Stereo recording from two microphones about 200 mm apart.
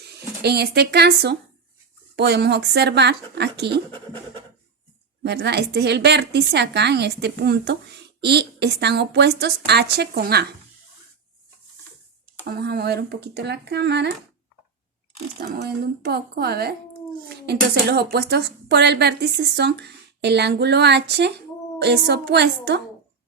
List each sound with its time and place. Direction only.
0.0 s speech: 55° right (ahead or behind)
5.2 s speech: 60° right (ahead or behind)
12.5 s speech: 50° right (ahead or behind)
15.4 s a woman's voice: 55° right (ahead or behind)